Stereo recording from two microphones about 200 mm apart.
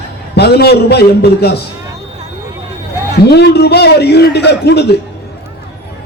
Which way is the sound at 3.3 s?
55° left (ahead or behind).